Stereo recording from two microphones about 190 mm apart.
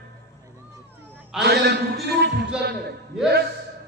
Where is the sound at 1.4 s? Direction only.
60° right (ahead or behind).